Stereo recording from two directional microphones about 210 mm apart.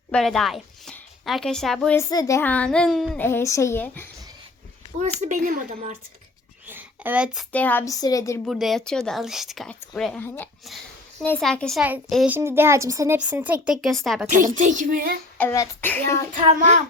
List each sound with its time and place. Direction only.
0.1 s speech: centre (ahead or behind)
3.2 s a woman's voice: 15° left (ahead or behind)
5.2 s speech: 40° right (ahead or behind)
6.7 s a sound: 10° right (ahead or behind)
7.5 s a woman's voice: 10° left (ahead or behind)
8.4 s a woman's voice: centre (ahead or behind)
14.3 s a woman's voice: 35° right (ahead or behind)
15.4 s a woman's voice: 10° left (ahead or behind)
16.3 s a woman's voice: 35° right (ahead or behind)